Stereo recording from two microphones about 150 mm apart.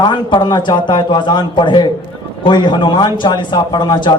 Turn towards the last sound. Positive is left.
turn(degrees=30)  # may be behind; listen again after turning